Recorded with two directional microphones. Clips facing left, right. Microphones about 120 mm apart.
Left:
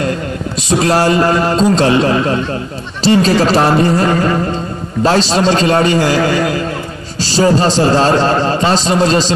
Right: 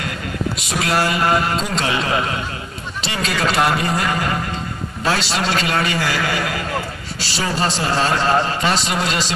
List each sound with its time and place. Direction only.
0.6 s a man's voice: 30° left (ahead or behind)